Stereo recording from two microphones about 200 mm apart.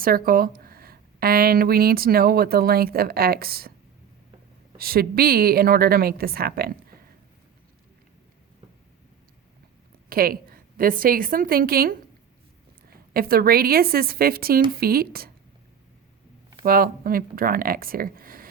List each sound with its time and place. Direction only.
0.0 s speech: 45° right (ahead or behind)
4.8 s speech: 50° right (ahead or behind)
10.1 s a woman's voice: 50° right (ahead or behind)
13.1 s speech: 50° right (ahead or behind)
16.6 s speech: 45° right (ahead or behind)